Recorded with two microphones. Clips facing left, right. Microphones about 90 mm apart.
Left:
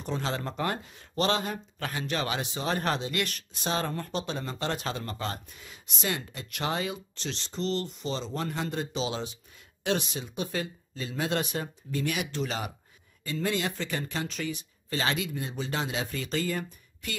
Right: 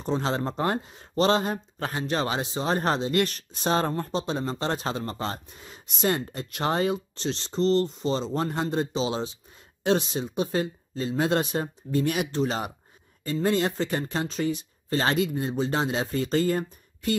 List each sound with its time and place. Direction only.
0.0 s speech: 30° right (ahead or behind)